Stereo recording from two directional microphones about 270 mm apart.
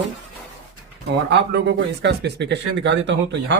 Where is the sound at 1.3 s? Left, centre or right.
Right.